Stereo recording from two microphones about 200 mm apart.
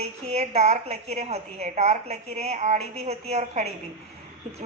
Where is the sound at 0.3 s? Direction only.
35° right (ahead or behind).